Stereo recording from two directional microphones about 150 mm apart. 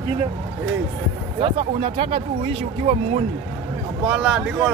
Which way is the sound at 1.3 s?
35° right (ahead or behind).